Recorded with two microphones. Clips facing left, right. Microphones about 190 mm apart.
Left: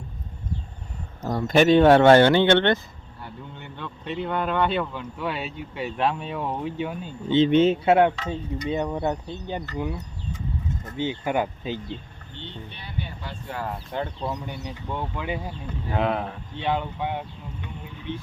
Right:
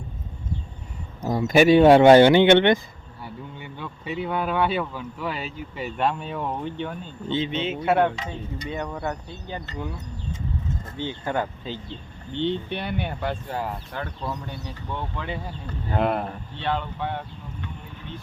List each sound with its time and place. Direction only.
1.2 s speech: 10° right (ahead or behind); by 7.3 s 10° left (ahead or behind)
7.5 s speech: 45° left (ahead or behind)
7.9 s speech: 15° left (ahead or behind)
10.9 s speech: 15° left (ahead or behind)
12.4 s speech: 70° right (ahead or behind)
13.9 s speech: 20° left (ahead or behind)
16.0 s speech: 5° right (ahead or behind)
16.6 s speech: 15° left (ahead or behind)